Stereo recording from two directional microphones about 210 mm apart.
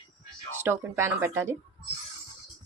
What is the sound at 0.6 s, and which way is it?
Speech, 10° right (ahead or behind).